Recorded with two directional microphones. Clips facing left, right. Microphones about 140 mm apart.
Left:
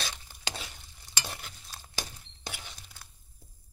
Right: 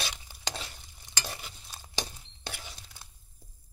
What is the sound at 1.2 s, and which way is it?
Stir, centre (ahead or behind).